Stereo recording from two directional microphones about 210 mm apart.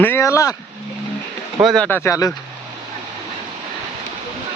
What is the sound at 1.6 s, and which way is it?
Speech, 5° left (ahead or behind).